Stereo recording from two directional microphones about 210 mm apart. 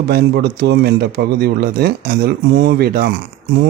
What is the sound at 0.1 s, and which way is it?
Speech, 50° right (ahead or behind).